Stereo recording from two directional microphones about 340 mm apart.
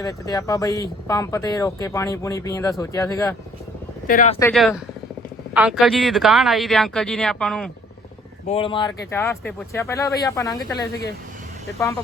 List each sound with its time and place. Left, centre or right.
0.0 s speech: centre
4.0 s speech: left
4.4 s speech: centre
8.4 s speech: centre